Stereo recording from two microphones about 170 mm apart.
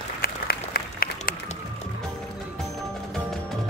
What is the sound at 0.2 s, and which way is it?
Applause, 65° left (ahead or behind).